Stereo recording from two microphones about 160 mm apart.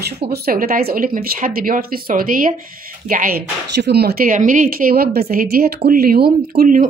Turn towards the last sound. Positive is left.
turn(degrees=-55)  # may be behind; listen again after turning